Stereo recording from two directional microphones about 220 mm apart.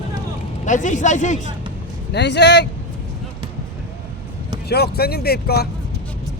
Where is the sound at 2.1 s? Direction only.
50° left (ahead or behind).